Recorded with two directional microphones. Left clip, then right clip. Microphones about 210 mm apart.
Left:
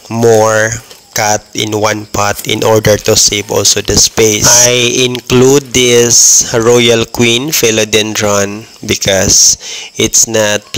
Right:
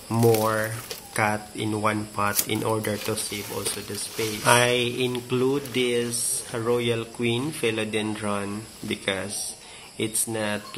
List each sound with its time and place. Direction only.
0.1 s speech: 45° left (ahead or behind)